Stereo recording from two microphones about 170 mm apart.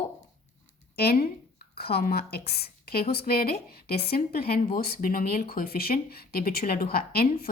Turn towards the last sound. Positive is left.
turn(degrees=65)  # may be behind; listen again after turning